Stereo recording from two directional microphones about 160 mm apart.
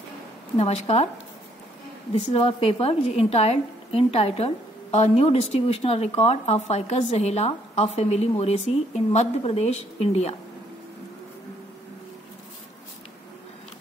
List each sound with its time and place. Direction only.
0.6 s a woman's voice: 40° left (ahead or behind)
2.1 s a woman's voice: 35° left (ahead or behind)